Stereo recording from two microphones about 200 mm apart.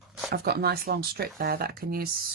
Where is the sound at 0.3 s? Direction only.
50° right (ahead or behind).